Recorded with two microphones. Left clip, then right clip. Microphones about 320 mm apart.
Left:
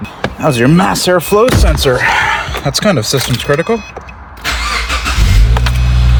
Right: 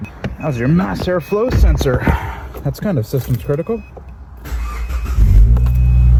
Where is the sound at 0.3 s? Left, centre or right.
Left.